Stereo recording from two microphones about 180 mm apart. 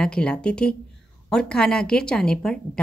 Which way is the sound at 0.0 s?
5° left (ahead or behind).